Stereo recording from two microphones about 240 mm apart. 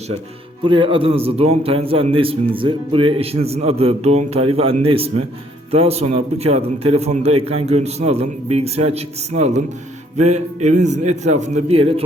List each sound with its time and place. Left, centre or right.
0.6 s a man's voice: right